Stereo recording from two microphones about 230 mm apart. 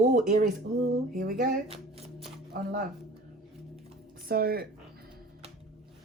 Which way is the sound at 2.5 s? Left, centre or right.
Right.